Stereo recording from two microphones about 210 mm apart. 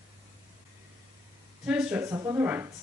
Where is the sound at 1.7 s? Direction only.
5° right (ahead or behind).